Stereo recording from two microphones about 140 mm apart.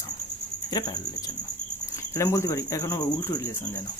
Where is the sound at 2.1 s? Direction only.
20° left (ahead or behind).